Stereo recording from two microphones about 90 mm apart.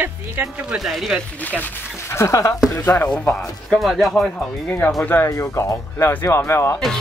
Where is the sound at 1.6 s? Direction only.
30° left (ahead or behind).